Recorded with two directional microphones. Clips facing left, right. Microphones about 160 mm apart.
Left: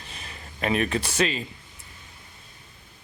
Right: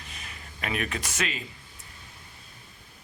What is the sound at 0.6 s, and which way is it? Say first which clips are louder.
Speech: left 7 dB; 30° left (ahead or behind).